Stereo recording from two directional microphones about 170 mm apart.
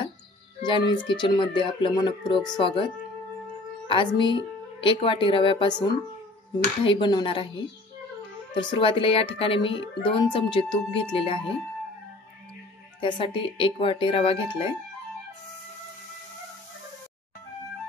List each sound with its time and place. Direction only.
0.6 s speech: 25° left (ahead or behind)
8.5 s a woman's voice: 30° left (ahead or behind)
13.0 s a woman's voice: 30° left (ahead or behind)